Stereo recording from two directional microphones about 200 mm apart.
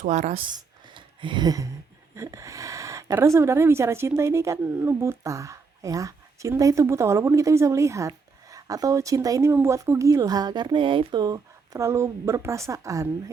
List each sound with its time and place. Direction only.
0.0 s speech: 35° right (ahead or behind)
0.9 s a sound: 25° right (ahead or behind)
2.1 s speech: 15° right (ahead or behind)